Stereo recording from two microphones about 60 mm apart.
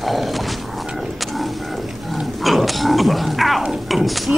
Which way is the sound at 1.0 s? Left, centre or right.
Centre.